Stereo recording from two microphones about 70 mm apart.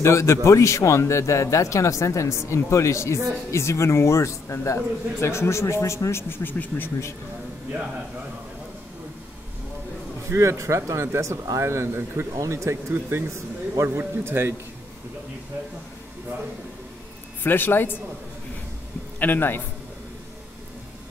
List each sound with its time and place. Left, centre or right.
0.0 s a man's voice: left
10.2 s a man's voice: right
17.4 s a man's voice: left
19.1 s a man's voice: left